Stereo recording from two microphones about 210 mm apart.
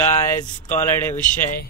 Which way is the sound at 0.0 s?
10° left (ahead or behind).